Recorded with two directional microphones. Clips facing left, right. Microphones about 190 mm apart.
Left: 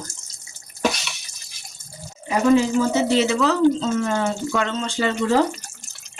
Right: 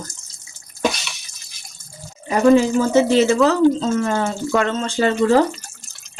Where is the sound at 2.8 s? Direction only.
45° right (ahead or behind).